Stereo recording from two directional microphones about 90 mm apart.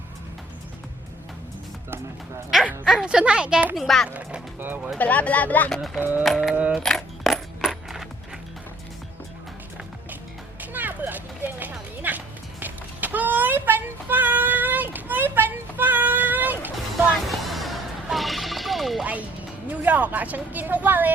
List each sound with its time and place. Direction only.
2.8 s a woman's voice: 5° right (ahead or behind)
3.8 s speech: 5° left (ahead or behind)
4.1 s a woman's voice: 15° right (ahead or behind)
4.9 s speech: 15° left (ahead or behind)
5.7 s speech: 5° left (ahead or behind)
6.0 s speech: 20° right (ahead or behind)
6.2 s speech: centre (ahead or behind)
6.5 s a woman's voice: 15° right (ahead or behind)
6.8 s coin: 5° left (ahead or behind)
10.6 s a sound: 20° right (ahead or behind)
16.7 s music: centre (ahead or behind)
19.0 s music: 15° right (ahead or behind)